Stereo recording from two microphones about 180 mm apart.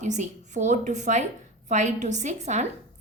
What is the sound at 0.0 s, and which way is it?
A woman's voice, 40° right (ahead or behind).